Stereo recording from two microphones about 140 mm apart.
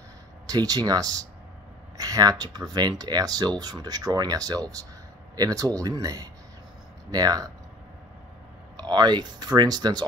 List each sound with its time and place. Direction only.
0.5 s speech: 30° right (ahead or behind)
8.7 s speech: 30° right (ahead or behind)